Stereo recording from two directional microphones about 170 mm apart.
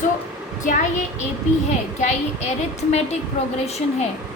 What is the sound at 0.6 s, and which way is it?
Speech, 45° left (ahead or behind).